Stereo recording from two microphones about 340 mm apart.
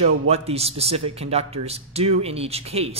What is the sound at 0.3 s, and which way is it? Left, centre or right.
Speech, centre.